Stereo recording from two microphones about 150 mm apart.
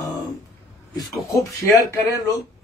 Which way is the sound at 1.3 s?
20° left (ahead or behind).